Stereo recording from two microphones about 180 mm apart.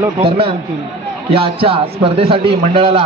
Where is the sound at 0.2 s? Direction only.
30° right (ahead or behind).